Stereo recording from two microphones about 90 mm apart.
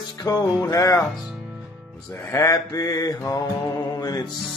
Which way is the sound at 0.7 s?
40° left (ahead or behind).